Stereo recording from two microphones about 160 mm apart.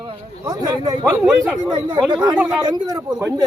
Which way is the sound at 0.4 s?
25° right (ahead or behind).